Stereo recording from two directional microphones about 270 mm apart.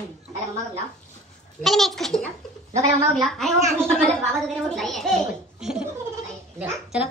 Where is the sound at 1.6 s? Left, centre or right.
Centre.